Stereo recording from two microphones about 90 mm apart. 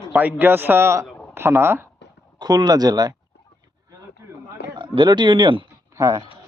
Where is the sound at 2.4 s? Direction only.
50° right (ahead or behind).